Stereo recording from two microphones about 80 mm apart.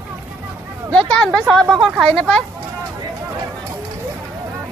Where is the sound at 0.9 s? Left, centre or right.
Centre.